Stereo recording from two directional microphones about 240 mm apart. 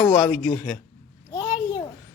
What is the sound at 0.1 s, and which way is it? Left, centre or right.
Speech, centre.